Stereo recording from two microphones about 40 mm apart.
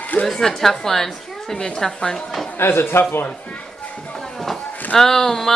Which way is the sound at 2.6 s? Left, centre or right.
Left.